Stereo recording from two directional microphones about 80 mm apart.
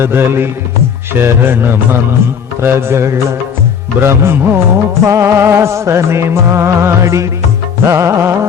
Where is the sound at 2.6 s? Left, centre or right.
Right.